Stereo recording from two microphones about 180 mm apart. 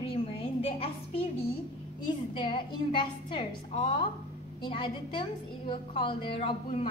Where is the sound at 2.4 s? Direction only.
25° left (ahead or behind).